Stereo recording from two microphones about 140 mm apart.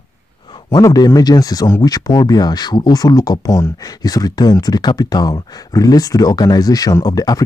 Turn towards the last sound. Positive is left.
turn(degrees=30)  # may be behind; listen again after turning